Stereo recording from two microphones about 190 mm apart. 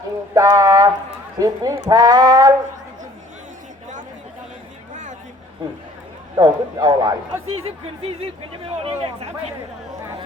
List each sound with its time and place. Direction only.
0.3 s speech: 15° right (ahead or behind)
6.3 s speech: 20° right (ahead or behind)
8.8 s speech: 30° right (ahead or behind)